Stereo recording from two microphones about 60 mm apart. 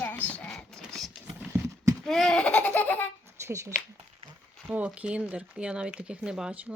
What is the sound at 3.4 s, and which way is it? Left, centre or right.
Speech, right.